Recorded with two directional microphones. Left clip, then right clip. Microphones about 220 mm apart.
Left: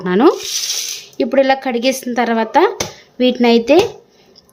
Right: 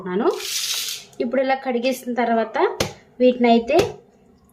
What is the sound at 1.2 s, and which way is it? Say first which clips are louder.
Speech: left 7 dB; 40° left (ahead or behind).